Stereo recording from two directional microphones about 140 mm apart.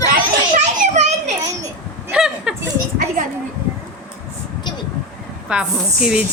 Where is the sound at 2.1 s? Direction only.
5° right (ahead or behind).